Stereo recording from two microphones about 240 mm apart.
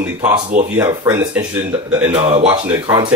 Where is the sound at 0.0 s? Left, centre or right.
Centre.